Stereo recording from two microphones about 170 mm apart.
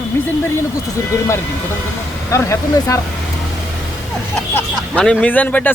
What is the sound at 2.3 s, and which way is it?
Speech, 20° left (ahead or behind).